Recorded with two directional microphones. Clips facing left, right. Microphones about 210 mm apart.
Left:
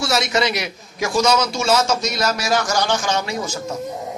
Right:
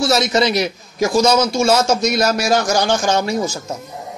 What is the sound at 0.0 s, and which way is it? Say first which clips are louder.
A man's voice: right 4 dB; 35° right (ahead or behind).